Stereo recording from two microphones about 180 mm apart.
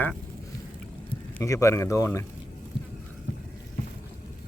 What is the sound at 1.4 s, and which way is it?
Speech, 15° left (ahead or behind).